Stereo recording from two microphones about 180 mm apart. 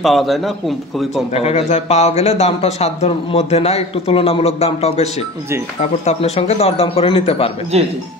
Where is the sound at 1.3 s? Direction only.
35° left (ahead or behind).